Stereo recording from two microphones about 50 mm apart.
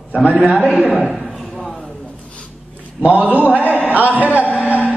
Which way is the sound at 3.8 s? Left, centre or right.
Right.